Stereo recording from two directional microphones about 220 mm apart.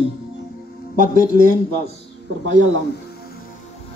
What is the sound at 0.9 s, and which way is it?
Speech, 40° right (ahead or behind).